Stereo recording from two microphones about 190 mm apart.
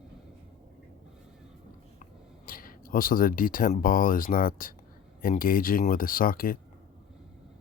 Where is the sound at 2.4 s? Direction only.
50° left (ahead or behind).